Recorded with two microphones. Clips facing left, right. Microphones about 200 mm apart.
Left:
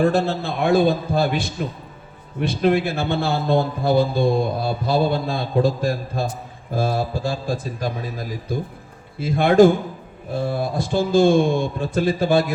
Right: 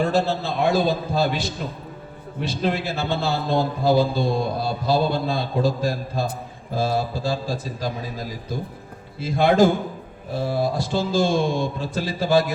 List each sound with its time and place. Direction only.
0.0 s speech: 55° left (ahead or behind)
9.1 s speech: 55° left (ahead or behind)